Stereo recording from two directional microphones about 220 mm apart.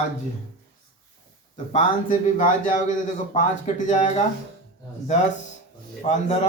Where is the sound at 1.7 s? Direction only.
35° left (ahead or behind).